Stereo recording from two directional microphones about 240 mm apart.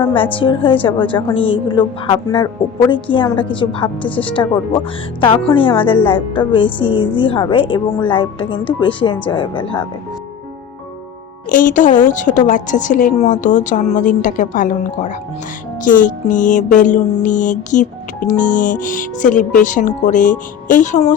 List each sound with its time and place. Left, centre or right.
0.1 s a woman's voice: left
11.4 s music: left